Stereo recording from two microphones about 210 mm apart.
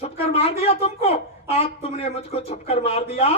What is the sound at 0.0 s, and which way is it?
Speech, 30° left (ahead or behind).